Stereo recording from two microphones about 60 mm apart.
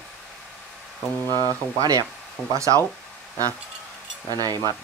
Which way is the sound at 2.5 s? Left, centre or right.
Right.